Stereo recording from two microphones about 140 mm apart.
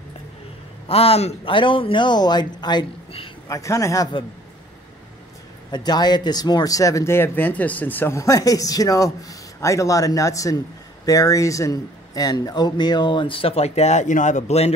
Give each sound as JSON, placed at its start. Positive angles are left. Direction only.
{"t": 0.8, "sound": "speech", "side_deg": 45}
{"t": 3.4, "sound": "speech", "side_deg": 25}
{"t": 5.7, "sound": "speech", "side_deg": 30}